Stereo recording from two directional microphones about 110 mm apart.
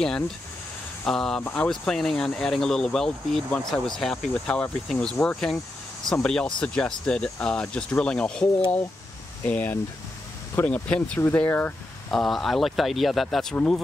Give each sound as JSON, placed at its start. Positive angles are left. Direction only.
{"t": 1.0, "sound": "speech", "side_deg": 5}
{"t": 12.1, "sound": "speech", "side_deg": 5}